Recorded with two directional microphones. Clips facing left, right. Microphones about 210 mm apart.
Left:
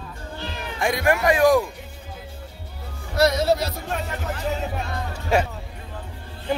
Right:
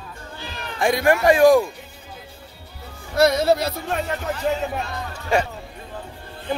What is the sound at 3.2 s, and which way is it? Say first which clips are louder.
Speech: right 2 dB; 55° right (ahead or behind).